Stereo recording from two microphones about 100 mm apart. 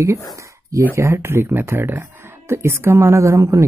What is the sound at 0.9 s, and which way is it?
Speech, 25° right (ahead or behind).